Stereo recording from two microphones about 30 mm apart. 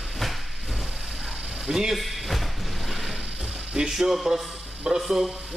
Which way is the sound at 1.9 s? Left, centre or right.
Centre.